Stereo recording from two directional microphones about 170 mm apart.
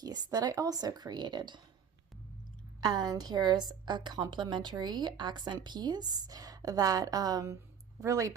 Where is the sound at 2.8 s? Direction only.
25° right (ahead or behind).